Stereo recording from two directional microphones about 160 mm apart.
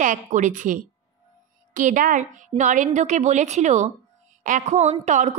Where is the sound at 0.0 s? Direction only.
55° right (ahead or behind).